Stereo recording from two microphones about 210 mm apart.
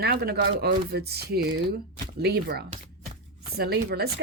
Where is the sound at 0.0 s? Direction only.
50° right (ahead or behind).